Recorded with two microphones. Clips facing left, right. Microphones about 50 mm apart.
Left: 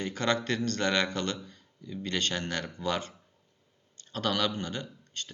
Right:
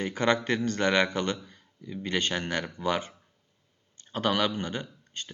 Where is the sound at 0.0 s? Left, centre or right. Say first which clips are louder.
Right 3 dB; centre.